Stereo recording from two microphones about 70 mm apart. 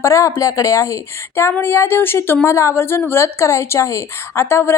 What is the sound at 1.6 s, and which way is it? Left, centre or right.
A woman's voice, left.